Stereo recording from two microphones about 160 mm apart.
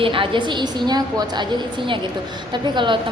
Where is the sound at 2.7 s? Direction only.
30° right (ahead or behind).